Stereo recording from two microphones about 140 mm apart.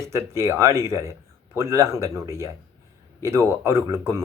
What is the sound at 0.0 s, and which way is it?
Speech, 20° right (ahead or behind).